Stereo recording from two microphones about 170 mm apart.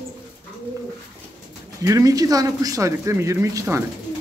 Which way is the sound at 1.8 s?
20° right (ahead or behind).